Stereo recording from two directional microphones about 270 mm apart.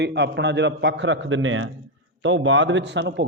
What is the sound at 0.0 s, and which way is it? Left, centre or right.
A man's voice, right.